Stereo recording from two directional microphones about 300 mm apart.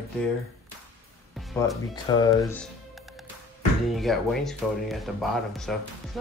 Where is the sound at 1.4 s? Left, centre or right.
Centre.